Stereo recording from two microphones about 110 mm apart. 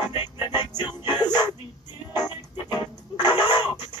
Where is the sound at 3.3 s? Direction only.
40° left (ahead or behind).